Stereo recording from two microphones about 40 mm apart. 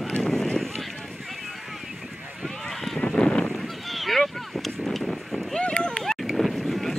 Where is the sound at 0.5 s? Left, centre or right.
Centre.